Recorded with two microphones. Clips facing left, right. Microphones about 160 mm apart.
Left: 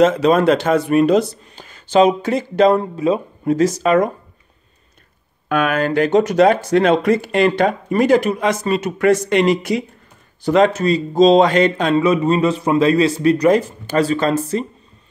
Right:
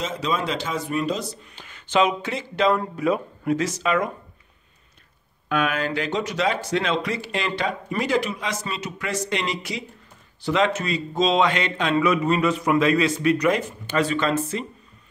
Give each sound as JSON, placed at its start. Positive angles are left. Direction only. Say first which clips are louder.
{"t": 0.0, "sound": "speech", "louder": "left 13 dB", "side_deg": 60}
{"t": 1.5, "sound": "a man's voice", "louder": "left 5 dB", "side_deg": 40}
{"t": 2.8, "sound": "speech", "louder": "left 5 dB", "side_deg": 25}
{"t": 3.5, "sound": "a man's voice", "louder": "left 9 dB", "side_deg": 40}
{"t": 5.5, "sound": "a man's voice", "louder": "left 6 dB", "side_deg": 50}